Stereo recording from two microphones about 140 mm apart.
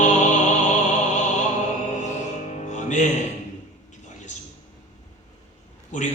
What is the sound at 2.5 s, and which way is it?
Music, 60° left (ahead or behind).